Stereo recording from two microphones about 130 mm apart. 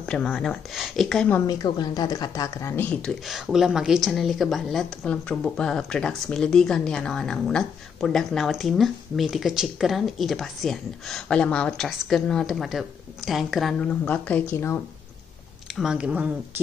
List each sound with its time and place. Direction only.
0.0 s a woman's voice: 5° left (ahead or behind)
1.5 s speech: 30° left (ahead or behind); by 3.1 s 10° left (ahead or behind)
3.3 s a woman's voice: 5° right (ahead or behind)
13.8 s speech: 10° left (ahead or behind)
15.7 s speech: 5° right (ahead or behind)